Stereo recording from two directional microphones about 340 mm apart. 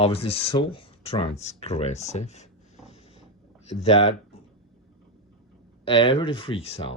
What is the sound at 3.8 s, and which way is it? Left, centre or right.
Speech, centre.